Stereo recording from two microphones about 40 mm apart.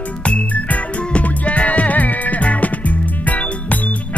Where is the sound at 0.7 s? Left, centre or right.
Left.